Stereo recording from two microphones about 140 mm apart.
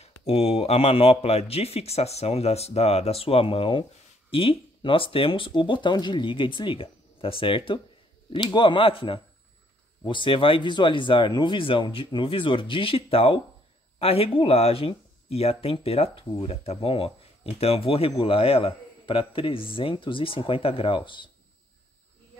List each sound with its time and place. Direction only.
0.2 s a man's voice: 45° left (ahead or behind)